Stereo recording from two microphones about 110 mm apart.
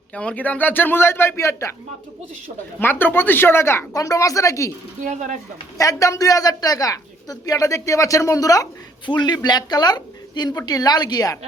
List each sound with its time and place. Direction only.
0.1 s a man's voice: 10° left (ahead or behind); by 1.7 s 25° left (ahead or behind)
2.8 s speech: 20° left (ahead or behind)
5.7 s speech: 30° left (ahead or behind)